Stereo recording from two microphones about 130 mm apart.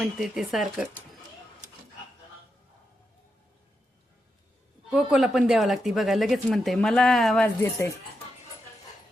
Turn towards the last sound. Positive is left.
turn(degrees=15)  # may be behind; listen again after turning